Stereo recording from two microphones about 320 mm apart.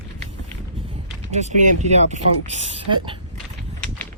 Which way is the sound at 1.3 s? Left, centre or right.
Right.